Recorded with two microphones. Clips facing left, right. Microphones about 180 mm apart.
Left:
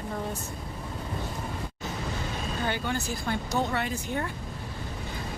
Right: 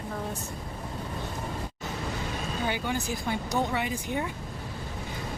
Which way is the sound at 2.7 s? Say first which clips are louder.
Right 1 dB; 15° right (ahead or behind).